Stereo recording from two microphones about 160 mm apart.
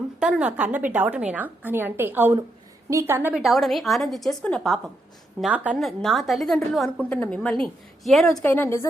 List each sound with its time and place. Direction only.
0.2 s a woman's voice: 5° right (ahead or behind)
3.4 s a woman's voice: centre (ahead or behind)
5.4 s a woman's voice: 10° right (ahead or behind)
8.4 s a woman's voice: 15° left (ahead or behind)